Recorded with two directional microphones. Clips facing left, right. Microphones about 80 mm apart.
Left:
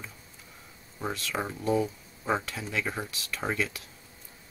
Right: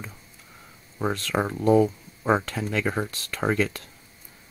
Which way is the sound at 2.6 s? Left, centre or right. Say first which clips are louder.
Right 6 dB; right.